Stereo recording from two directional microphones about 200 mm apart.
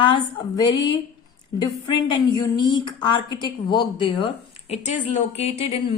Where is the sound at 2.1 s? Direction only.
20° left (ahead or behind).